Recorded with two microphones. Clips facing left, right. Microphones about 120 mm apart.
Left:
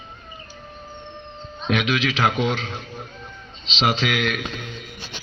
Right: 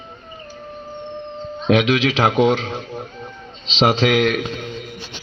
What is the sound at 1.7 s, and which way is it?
A man's voice, 35° right (ahead or behind).